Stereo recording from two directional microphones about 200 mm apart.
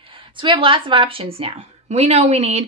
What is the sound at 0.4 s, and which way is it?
Speech, 25° right (ahead or behind).